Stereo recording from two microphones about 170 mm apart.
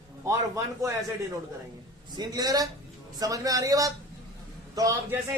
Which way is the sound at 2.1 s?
25° right (ahead or behind).